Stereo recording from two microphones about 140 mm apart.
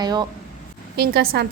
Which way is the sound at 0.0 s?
30° right (ahead or behind).